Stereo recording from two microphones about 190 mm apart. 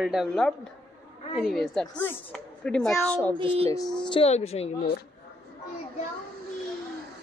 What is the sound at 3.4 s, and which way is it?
Speech, 30° right (ahead or behind).